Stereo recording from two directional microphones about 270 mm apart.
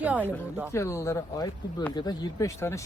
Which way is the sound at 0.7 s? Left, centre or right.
Centre.